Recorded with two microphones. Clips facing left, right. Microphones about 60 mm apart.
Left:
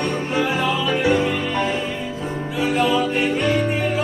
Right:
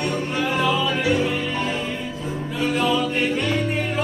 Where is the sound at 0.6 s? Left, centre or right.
Centre.